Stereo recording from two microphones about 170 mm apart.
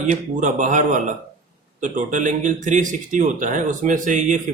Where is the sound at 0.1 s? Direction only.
45° right (ahead or behind).